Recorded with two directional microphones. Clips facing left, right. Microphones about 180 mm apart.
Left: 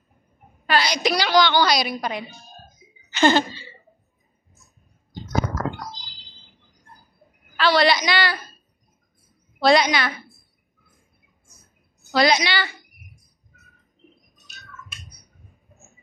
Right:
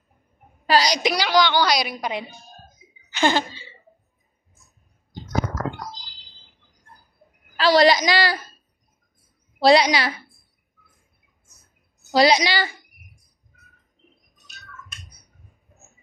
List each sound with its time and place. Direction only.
0.7 s a woman's voice: 35° right (ahead or behind)
1.0 s a child's voice: 10° right (ahead or behind)
7.5 s a woman's voice: 40° right (ahead or behind)
9.6 s a woman's voice: 35° right (ahead or behind)
12.1 s a woman's voice: 35° right (ahead or behind)